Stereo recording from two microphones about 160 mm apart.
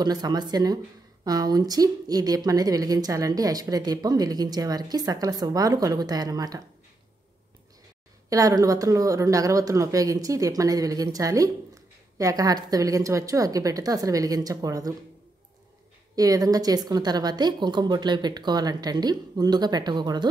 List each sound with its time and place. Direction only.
0.0 s speech: 25° right (ahead or behind)
8.3 s speech: 20° right (ahead or behind)
16.2 s speech: 20° right (ahead or behind)